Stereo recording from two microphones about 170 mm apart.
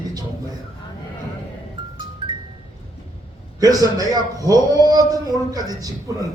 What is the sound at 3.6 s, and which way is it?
A man's voice, 20° right (ahead or behind).